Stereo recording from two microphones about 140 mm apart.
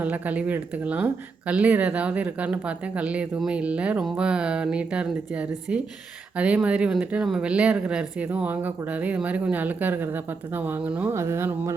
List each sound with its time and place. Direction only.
0.0 s speech: 10° right (ahead or behind)
11.1 s music: 20° right (ahead or behind)